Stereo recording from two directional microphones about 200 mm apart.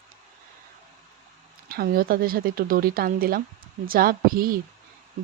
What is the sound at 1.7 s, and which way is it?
Speech, 45° right (ahead or behind).